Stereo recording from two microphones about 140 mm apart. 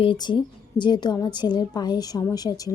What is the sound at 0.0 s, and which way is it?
A woman's voice, 35° left (ahead or behind).